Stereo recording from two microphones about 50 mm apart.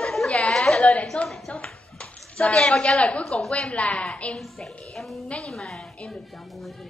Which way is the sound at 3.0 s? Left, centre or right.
Left.